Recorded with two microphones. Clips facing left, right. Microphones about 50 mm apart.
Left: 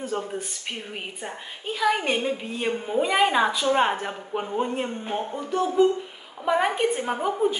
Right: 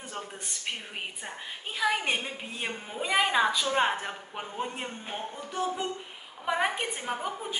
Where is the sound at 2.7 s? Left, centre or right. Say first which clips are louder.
Left 6 dB; centre.